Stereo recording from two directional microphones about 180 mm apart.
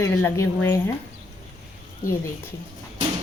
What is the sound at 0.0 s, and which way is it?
Speech, 15° left (ahead or behind).